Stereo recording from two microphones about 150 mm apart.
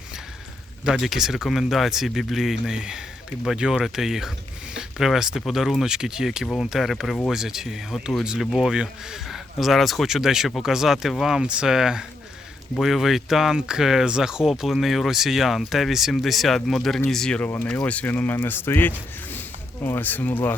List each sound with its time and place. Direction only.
0.9 s speech: 5° right (ahead or behind); by 20.6 s 10° left (ahead or behind)